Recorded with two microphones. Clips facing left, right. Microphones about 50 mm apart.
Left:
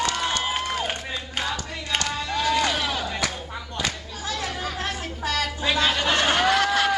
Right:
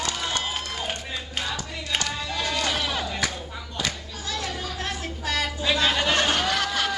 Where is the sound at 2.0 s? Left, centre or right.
Centre.